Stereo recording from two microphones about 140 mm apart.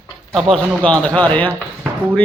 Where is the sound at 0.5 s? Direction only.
5° left (ahead or behind).